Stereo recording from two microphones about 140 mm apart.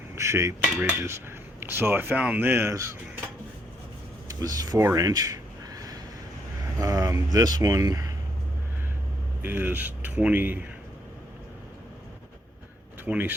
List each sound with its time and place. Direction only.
0.2 s cutlery: 20° right (ahead or behind)
0.6 s speech: 10° right (ahead or behind)
4.3 s speech: 25° right (ahead or behind)
4.9 s a sound: 25° right (ahead or behind)
6.7 s speech: 25° right (ahead or behind)
9.4 s speech: 15° right (ahead or behind)
13.1 s speech: 15° right (ahead or behind)